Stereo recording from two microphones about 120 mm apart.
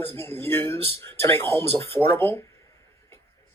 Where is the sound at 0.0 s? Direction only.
20° left (ahead or behind).